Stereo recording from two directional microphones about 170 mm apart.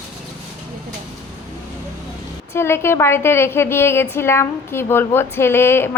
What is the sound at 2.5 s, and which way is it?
A woman's voice, 15° left (ahead or behind).